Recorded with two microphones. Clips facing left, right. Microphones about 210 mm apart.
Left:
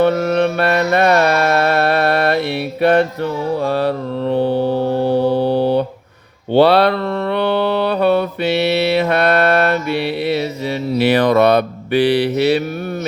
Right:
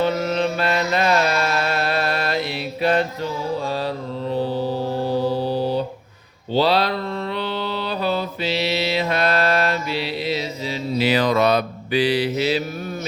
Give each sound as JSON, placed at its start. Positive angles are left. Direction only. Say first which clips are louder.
{"t": 0.0, "sound": "mantra", "louder": "left 6 dB", "side_deg": 60}